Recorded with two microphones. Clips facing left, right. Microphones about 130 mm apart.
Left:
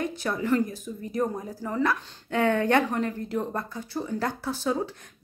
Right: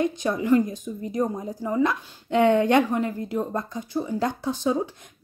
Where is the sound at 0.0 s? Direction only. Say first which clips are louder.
Right 4 dB; 20° right (ahead or behind).